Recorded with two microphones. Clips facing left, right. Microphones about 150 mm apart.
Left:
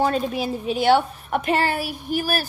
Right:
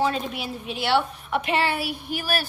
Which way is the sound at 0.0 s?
45° left (ahead or behind).